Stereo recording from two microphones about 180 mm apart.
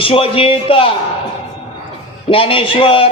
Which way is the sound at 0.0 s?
30° left (ahead or behind).